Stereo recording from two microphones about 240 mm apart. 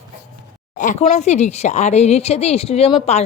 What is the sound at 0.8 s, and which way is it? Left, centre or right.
A woman's voice, left.